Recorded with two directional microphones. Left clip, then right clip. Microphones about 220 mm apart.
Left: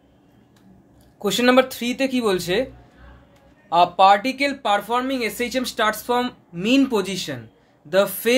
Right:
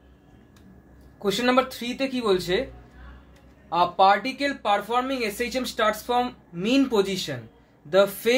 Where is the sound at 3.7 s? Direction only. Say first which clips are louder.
Left 5 dB; 30° left (ahead or behind).